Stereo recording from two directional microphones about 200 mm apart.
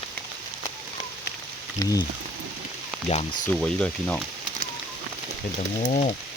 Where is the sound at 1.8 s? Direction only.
15° left (ahead or behind).